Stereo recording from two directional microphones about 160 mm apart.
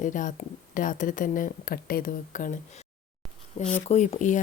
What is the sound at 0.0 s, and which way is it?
Speech, 55° left (ahead or behind).